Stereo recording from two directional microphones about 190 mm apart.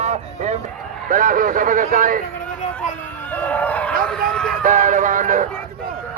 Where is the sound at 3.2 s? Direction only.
10° left (ahead or behind).